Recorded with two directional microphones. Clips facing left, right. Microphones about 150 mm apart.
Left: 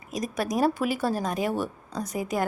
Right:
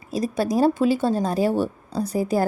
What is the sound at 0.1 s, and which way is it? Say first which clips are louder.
Speech: right 6 dB; 30° right (ahead or behind).